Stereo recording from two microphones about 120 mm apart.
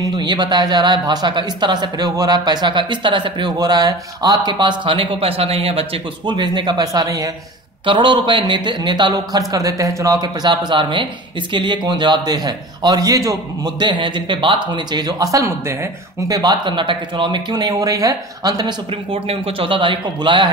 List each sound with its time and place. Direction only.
0.0 s speech: 35° right (ahead or behind); by 5.9 s 55° right (ahead or behind)
6.2 s speech: 40° right (ahead or behind)
7.8 s speech: 40° right (ahead or behind)
19.2 s a man's voice: 50° right (ahead or behind)